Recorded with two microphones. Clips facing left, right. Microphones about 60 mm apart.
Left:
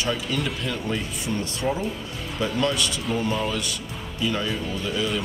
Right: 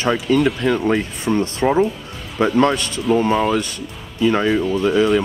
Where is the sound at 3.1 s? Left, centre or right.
Right.